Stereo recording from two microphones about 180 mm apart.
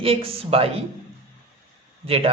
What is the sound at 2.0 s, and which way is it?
Speech, 30° right (ahead or behind).